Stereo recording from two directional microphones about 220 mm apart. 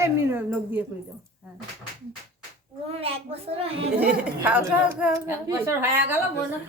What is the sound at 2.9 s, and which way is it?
Speech, 25° right (ahead or behind).